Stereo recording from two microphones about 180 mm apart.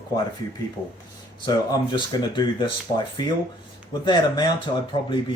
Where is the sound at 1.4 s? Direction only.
25° left (ahead or behind).